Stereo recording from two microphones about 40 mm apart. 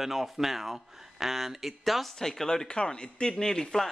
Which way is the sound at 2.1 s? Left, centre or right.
Centre.